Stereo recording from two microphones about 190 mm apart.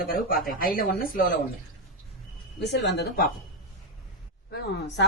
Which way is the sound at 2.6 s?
65° left (ahead or behind).